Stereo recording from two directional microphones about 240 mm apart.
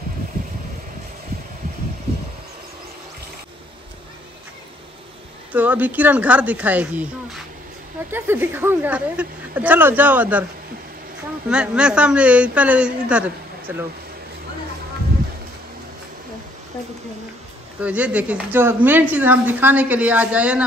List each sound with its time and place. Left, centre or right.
5.5 s speech: centre
8.1 s speech: centre
11.5 s a woman's voice: centre
17.7 s a woman's voice: centre